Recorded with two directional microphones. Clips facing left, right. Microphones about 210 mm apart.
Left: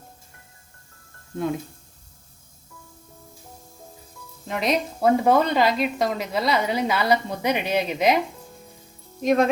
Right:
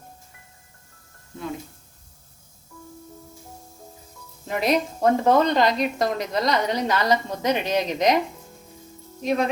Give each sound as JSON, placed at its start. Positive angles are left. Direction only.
{"t": 4.4, "sound": "speech", "side_deg": 0}
{"t": 5.0, "sound": "a woman's voice", "side_deg": 10}
{"t": 9.2, "sound": "speech", "side_deg": 45}